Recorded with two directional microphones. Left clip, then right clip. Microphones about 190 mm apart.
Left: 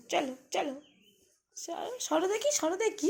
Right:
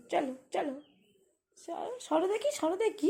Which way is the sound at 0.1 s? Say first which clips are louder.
Left 1 dB; 15° right (ahead or behind).